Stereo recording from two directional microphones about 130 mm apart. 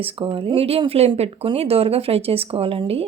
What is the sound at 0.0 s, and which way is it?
Speech, 45° right (ahead or behind).